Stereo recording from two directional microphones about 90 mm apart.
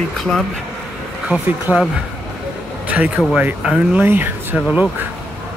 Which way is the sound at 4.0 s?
20° right (ahead or behind).